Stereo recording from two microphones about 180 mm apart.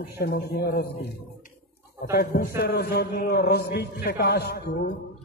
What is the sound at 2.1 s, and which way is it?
A man's voice, 60° left (ahead or behind).